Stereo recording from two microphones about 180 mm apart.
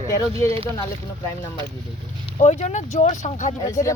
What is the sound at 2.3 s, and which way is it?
Speech, 40° left (ahead or behind).